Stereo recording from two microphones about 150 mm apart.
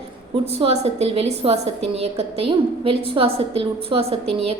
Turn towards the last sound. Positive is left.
turn(degrees=-40)  # may be behind; listen again after turning